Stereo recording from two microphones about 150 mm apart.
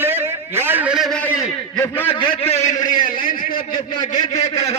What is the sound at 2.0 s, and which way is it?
A man's voice, 40° left (ahead or behind).